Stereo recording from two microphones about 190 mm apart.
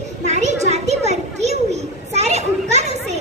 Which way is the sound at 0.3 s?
35° right (ahead or behind).